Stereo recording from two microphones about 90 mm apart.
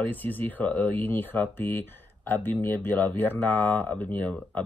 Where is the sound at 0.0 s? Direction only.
20° left (ahead or behind).